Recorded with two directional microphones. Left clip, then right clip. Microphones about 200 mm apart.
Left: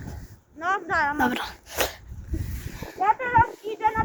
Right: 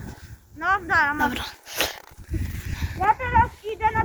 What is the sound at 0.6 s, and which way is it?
Speech, 20° left (ahead or behind).